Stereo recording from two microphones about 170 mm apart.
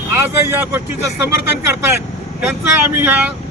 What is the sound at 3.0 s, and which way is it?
Speech, 10° right (ahead or behind).